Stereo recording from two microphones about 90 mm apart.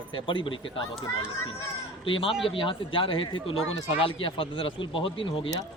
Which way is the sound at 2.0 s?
80° left.